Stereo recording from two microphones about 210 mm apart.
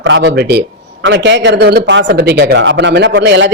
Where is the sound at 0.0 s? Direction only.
55° right (ahead or behind).